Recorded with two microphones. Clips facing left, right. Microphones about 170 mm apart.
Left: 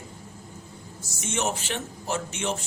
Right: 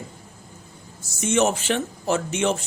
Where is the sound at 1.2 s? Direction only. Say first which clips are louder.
Right 8 dB; 90° right.